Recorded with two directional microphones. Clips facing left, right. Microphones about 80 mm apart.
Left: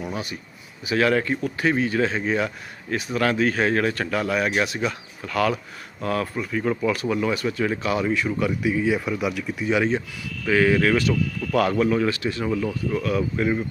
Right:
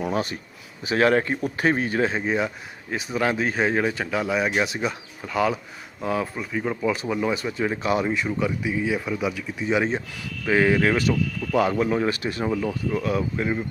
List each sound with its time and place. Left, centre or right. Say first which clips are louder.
0.1 s a sound: right 5 dB; right
0.9 s speech: right 1 dB; right
7.8 s speech: even; right
8.2 s speech: left 1 dB; centre
8.9 s speech: left 2 dB; centre
9.2 s speech: left 1 dB; right